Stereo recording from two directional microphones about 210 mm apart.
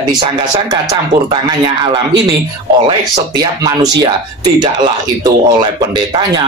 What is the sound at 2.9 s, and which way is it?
Speech, 20° right (ahead or behind).